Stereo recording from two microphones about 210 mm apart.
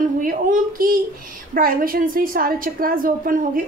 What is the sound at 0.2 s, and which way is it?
A child's voice, 40° right (ahead or behind).